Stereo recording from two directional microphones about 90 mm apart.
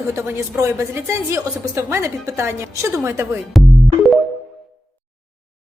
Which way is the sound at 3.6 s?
Centre (ahead or behind).